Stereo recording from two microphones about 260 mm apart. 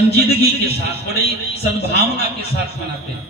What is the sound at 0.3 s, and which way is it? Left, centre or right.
A man's voice, right.